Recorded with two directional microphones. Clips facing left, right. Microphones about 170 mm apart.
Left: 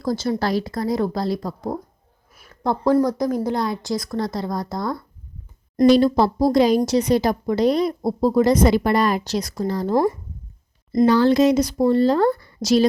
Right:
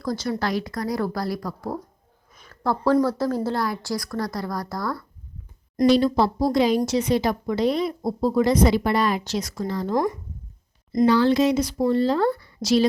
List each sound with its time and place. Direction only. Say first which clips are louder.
0.0 s speech: left 4 dB; 25° left (ahead or behind)
2.3 s a sound: left 1 dB; 5° left (ahead or behind)
2.6 s speech: left 2 dB; 15° left (ahead or behind)
5.8 s a woman's voice: left 3 dB; 45° left (ahead or behind)
11.0 s speech: left 3 dB; 45° left (ahead or behind)